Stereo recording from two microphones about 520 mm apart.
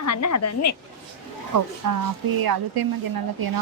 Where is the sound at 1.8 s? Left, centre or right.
Right.